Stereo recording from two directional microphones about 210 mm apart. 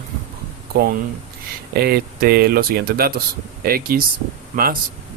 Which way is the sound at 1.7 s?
50° right (ahead or behind).